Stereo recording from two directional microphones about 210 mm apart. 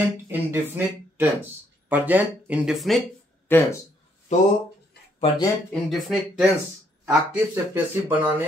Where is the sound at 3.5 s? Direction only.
10° left (ahead or behind).